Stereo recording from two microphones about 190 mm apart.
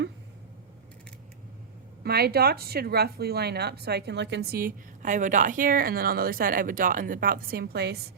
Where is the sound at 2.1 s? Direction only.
55° right (ahead or behind).